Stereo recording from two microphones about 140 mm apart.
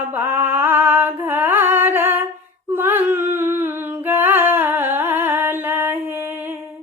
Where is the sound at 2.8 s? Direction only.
15° right (ahead or behind).